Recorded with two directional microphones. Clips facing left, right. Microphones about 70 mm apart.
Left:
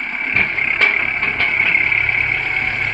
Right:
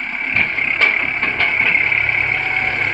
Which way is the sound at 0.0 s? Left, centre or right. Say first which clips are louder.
Even; centre.